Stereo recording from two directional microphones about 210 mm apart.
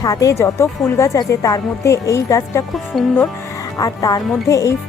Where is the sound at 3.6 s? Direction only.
15° left (ahead or behind).